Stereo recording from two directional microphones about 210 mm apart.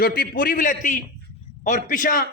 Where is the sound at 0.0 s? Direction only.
45° left (ahead or behind).